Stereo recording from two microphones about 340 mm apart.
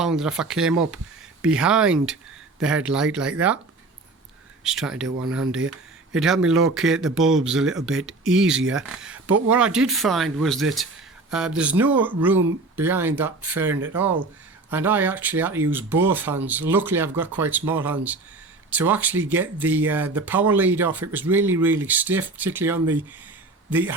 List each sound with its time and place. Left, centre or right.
0.0 s speech: centre
4.6 s speech: centre
5.5 s a sound: right
6.1 s speech: centre